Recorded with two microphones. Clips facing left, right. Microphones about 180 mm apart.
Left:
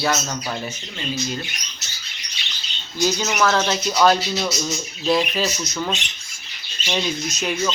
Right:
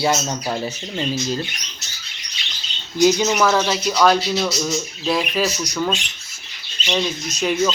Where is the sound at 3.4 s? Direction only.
10° right (ahead or behind).